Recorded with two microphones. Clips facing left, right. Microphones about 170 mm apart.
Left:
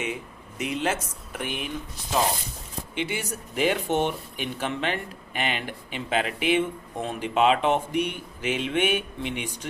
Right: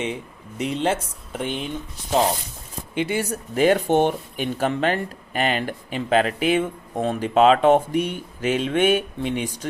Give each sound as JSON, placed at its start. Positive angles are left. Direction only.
{"t": 0.6, "sound": "speech", "side_deg": -30}
{"t": 2.9, "sound": "speech", "side_deg": -45}